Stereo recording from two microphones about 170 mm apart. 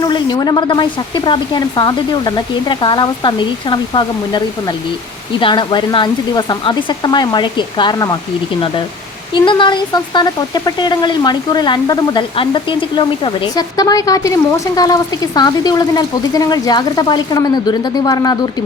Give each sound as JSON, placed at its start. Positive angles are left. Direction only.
{"t": 0.0, "sound": "speech", "side_deg": 25}
{"t": 9.3, "sound": "speech", "side_deg": 30}